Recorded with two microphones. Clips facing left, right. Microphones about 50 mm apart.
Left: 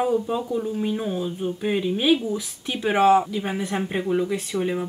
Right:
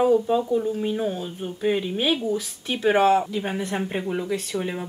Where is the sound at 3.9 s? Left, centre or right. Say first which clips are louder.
Left 6 dB; centre.